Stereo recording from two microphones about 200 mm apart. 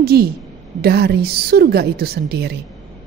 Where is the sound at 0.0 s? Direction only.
50° right (ahead or behind).